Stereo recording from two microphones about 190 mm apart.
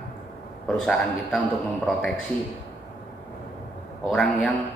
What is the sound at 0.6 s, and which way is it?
Speech, centre (ahead or behind).